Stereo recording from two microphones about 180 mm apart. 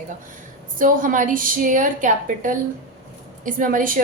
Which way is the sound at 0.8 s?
50° right (ahead or behind).